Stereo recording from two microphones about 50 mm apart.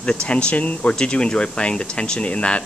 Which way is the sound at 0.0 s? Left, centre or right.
Left.